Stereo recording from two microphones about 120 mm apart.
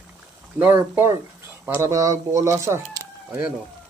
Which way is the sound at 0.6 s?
20° right (ahead or behind).